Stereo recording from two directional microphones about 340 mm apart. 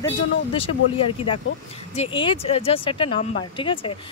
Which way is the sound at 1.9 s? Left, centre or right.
Centre.